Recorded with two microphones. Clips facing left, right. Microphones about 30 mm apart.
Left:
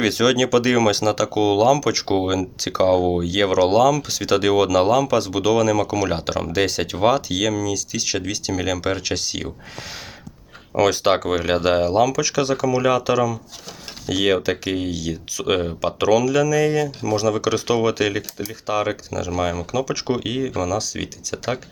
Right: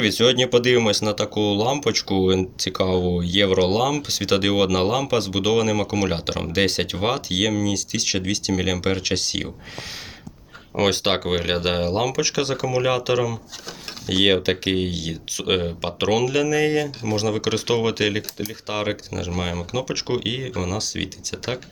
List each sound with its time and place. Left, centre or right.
0.0 s speech: centre
10.8 s speech: right
14.1 s speech: right